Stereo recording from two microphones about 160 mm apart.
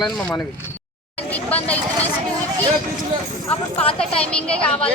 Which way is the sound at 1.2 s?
10° left (ahead or behind).